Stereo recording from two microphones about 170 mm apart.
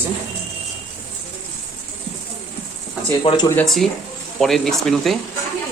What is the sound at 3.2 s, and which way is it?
Speech, 25° left (ahead or behind).